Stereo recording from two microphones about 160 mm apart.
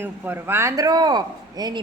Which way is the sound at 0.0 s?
15° right (ahead or behind).